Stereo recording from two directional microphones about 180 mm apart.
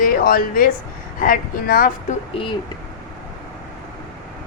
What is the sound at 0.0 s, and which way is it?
Speech, 55° left (ahead or behind).